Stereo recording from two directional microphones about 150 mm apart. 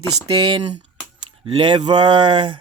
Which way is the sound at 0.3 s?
30° right (ahead or behind).